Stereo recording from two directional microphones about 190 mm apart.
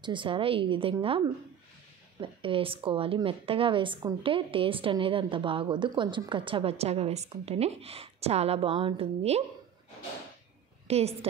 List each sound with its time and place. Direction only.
0.0 s a woman's voice: 25° right (ahead or behind)
10.9 s a woman's voice: 35° right (ahead or behind)